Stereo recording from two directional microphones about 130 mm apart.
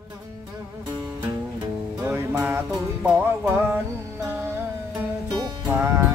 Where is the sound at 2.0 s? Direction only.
15° right (ahead or behind).